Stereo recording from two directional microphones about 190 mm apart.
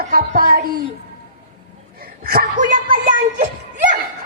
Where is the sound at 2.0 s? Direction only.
50° right (ahead or behind).